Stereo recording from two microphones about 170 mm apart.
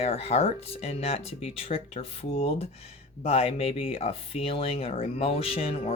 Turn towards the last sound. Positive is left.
turn(degrees=35)  # may be behind; listen again after turning